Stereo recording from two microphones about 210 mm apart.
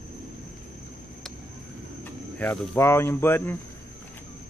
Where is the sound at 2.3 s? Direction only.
10° left (ahead or behind).